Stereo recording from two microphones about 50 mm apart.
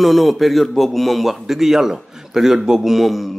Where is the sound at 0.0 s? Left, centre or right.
Centre.